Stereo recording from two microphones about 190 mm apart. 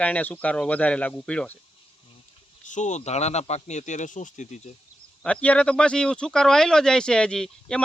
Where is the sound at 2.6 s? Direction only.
40° left (ahead or behind).